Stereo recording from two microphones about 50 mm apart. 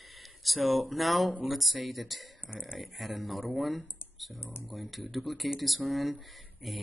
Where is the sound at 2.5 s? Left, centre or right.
Centre.